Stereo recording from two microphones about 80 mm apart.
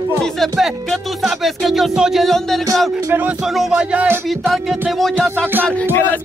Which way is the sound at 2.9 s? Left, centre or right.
Right.